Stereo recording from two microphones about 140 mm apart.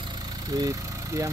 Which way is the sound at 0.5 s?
25° right (ahead or behind).